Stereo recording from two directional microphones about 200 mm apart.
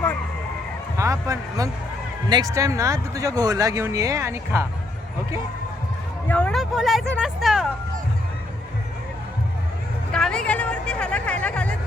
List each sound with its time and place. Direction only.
0.9 s speech: 15° right (ahead or behind)
6.2 s speech: 5° left (ahead or behind)
10.1 s speech: 5° left (ahead or behind)